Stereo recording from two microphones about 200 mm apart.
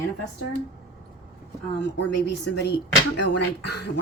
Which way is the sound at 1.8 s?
60° left (ahead or behind).